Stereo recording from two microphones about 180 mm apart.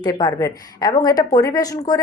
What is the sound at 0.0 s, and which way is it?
A woman's voice, 20° left (ahead or behind).